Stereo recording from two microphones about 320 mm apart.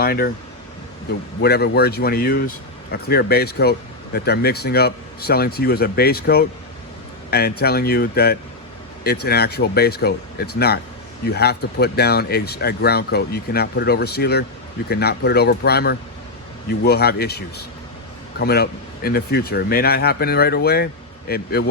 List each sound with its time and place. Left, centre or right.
0.0 s speech: left
1.4 s speech: left